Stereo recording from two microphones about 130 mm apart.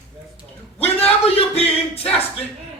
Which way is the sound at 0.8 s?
50° left (ahead or behind).